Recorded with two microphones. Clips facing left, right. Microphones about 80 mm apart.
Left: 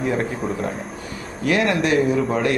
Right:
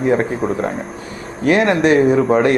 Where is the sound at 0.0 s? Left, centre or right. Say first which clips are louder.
Right 6 dB; right.